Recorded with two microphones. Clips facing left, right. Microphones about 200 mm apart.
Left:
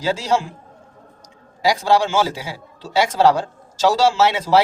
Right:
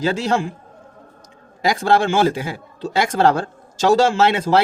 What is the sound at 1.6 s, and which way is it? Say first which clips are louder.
A man's voice: even; 55° right (ahead or behind).